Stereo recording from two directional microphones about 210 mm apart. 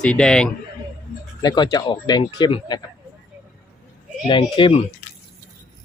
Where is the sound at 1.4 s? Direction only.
20° left (ahead or behind).